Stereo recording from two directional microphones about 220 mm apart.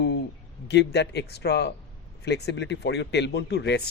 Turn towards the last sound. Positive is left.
turn(degrees=50)  # may be behind; listen again after turning